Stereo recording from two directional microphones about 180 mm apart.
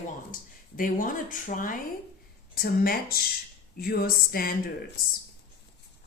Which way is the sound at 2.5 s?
55° left (ahead or behind).